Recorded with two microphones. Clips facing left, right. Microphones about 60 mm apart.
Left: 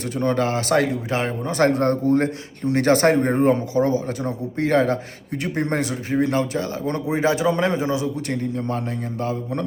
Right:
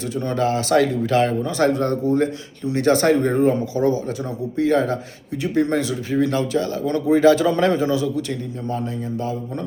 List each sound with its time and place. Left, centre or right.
0.2 s speech: left
8.3 s a man's voice: left